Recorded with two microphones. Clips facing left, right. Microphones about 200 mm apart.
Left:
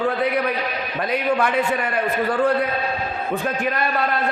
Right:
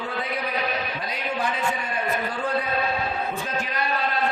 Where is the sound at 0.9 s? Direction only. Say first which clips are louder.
Left 8 dB; 65° left (ahead or behind).